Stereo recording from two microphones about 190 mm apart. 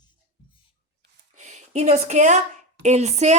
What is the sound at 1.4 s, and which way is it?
A woman's voice, 40° right (ahead or behind).